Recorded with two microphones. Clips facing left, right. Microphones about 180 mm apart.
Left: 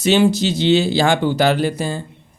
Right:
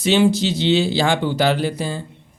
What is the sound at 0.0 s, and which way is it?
Speech, 45° left (ahead or behind).